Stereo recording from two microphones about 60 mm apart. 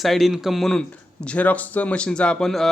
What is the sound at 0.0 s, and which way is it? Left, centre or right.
Speech, centre.